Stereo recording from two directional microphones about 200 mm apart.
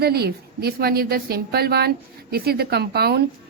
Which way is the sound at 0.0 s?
50° right (ahead or behind).